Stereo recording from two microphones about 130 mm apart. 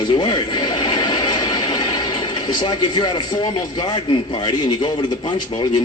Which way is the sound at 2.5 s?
35° left (ahead or behind).